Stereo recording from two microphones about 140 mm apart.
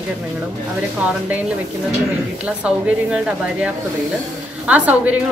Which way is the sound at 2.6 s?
10° right (ahead or behind).